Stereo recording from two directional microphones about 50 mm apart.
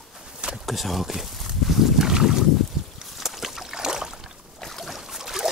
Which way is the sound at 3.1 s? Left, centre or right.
Centre.